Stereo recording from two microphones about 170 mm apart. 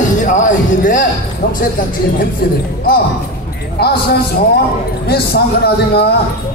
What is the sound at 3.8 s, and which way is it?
A man's voice, 70° left (ahead or behind).